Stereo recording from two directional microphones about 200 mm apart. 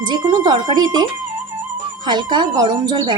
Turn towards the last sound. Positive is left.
turn(degrees=-20)  # may be behind; listen again after turning